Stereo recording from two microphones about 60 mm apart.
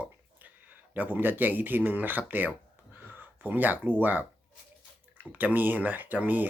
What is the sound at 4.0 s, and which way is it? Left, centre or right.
Speech, right.